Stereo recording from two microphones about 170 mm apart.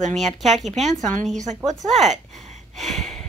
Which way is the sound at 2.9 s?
Centre (ahead or behind).